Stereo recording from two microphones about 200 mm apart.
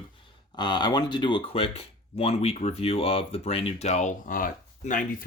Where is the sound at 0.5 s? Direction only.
20° left (ahead or behind).